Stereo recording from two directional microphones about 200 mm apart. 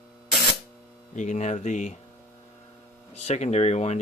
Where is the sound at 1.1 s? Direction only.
40° left (ahead or behind).